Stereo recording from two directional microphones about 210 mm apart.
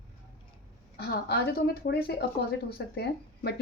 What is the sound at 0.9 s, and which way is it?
Speech, 50° left (ahead or behind).